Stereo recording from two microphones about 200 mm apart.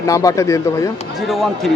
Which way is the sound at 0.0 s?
15° left (ahead or behind).